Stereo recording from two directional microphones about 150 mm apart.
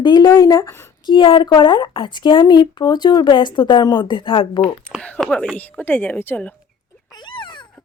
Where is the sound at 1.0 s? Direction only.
30° left (ahead or behind).